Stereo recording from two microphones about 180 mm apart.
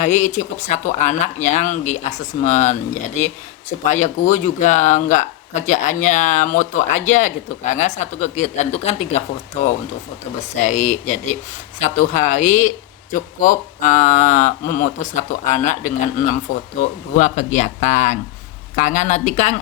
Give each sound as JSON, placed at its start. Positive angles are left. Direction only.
{"t": 0.0, "sound": "speech", "side_deg": 40}
{"t": 3.8, "sound": "speech", "side_deg": 40}
{"t": 10.5, "sound": "speech", "side_deg": 40}